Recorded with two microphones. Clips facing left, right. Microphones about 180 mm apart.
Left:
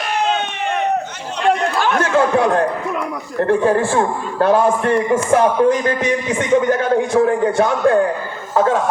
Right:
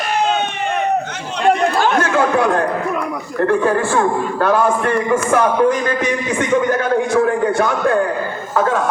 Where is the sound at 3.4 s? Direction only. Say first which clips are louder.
Left 1 dB; 25° left (ahead or behind).